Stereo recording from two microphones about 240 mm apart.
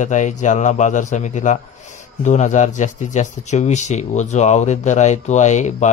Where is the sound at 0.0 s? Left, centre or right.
Left.